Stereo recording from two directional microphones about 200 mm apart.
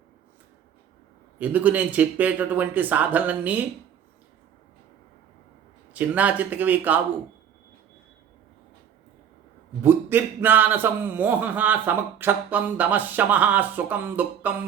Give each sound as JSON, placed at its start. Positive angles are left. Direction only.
{"t": 1.4, "sound": "a man's voice", "side_deg": -10}
{"t": 5.9, "sound": "a man's voice", "side_deg": -5}
{"t": 9.8, "sound": "a man's voice", "side_deg": -10}